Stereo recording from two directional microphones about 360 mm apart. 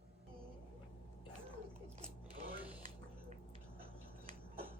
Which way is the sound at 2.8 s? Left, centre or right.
Centre.